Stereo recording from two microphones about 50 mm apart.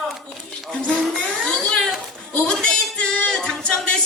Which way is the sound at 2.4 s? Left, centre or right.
Centre.